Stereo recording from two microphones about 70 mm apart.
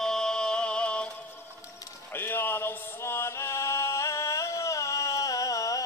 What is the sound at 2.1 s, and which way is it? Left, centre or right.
Chant, left.